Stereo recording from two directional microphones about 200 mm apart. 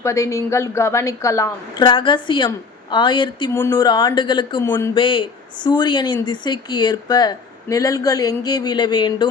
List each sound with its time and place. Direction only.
0.0 s a woman's voice: 15° left (ahead or behind)